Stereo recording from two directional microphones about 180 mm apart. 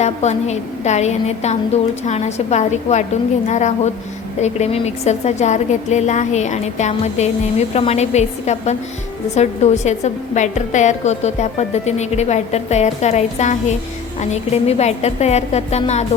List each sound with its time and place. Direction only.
0.0 s a woman's voice: 40° left (ahead or behind)